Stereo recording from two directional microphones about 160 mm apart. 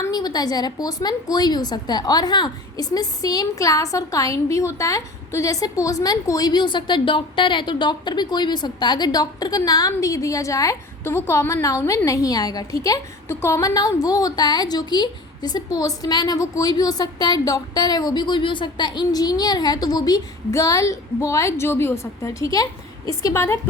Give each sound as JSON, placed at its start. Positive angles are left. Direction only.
{"t": 0.0, "sound": "a woman's voice", "side_deg": 25}